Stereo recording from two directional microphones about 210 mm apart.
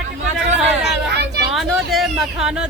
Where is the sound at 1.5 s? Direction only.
Centre (ahead or behind).